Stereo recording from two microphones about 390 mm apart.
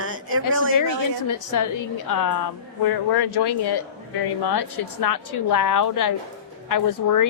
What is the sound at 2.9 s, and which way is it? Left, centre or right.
Speech, left.